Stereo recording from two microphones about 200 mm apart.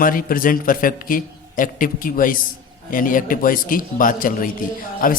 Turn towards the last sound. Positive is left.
turn(degrees=45)  # may be behind; listen again after turning